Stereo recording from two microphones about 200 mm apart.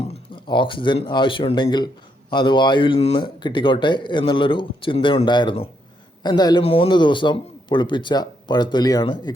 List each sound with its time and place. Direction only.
0.1 s a man's voice: 25° left (ahead or behind)